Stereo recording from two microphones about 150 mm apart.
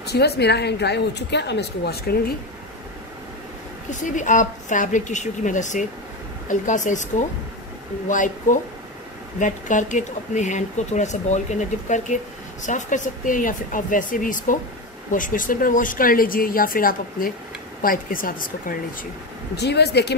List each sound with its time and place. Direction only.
0.0 s a woman's voice: 90° left
3.9 s speech: 55° left (ahead or behind)
12.6 s speech: 55° left (ahead or behind)
19.5 s a woman's voice: 90° left